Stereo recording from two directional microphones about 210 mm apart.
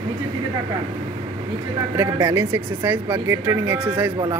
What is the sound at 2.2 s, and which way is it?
Speech, 10° right (ahead or behind).